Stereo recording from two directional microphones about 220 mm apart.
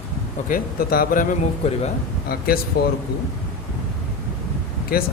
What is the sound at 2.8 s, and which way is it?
Speech, 45° left (ahead or behind).